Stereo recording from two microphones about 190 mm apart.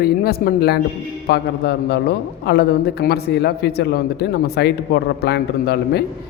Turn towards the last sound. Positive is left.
turn(degrees=60)  # may be behind; listen again after turning